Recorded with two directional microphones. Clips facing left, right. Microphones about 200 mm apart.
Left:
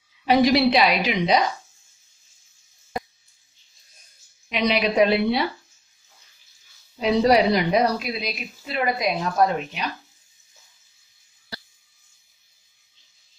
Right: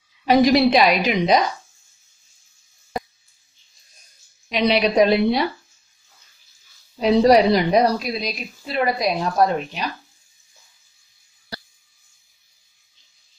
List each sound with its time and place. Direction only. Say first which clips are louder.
0.2 s a woman's voice: right 3 dB; 45° right (ahead or behind)
4.5 s a woman's voice: right 3 dB; 35° right (ahead or behind)
7.0 s a woman's voice: right 4 dB; 40° right (ahead or behind)